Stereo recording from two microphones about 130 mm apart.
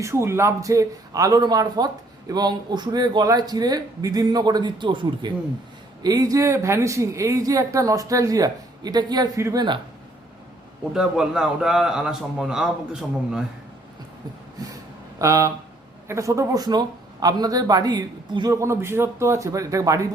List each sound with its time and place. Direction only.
0.0 s speech: 20° right (ahead or behind)
10.9 s a man's voice: 5° right (ahead or behind)
15.2 s speech: 25° right (ahead or behind)
18.5 s speech: 20° right (ahead or behind)